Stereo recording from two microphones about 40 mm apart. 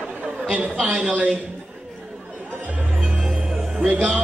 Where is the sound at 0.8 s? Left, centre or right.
Right.